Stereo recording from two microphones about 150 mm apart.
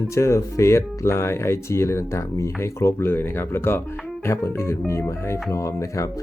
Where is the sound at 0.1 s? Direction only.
20° left (ahead or behind).